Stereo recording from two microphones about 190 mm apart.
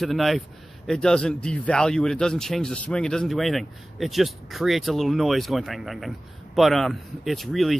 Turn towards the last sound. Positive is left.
turn(degrees=0)  # may be behind; listen again after turning